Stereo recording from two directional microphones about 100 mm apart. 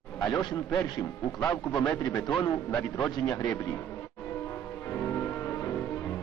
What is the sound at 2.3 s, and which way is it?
Speech, 10° left (ahead or behind).